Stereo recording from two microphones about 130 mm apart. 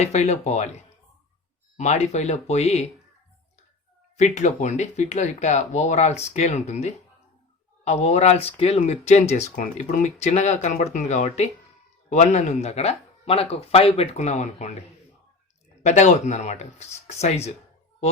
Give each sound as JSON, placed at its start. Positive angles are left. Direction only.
{"t": 0.0, "sound": "speech", "side_deg": 60}
{"t": 4.2, "sound": "speech", "side_deg": 65}
{"t": 15.8, "sound": "speech", "side_deg": 65}